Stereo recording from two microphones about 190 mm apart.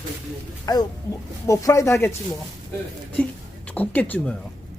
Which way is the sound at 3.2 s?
10° left (ahead or behind).